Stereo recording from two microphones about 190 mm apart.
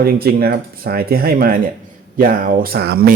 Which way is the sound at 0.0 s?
55° right (ahead or behind).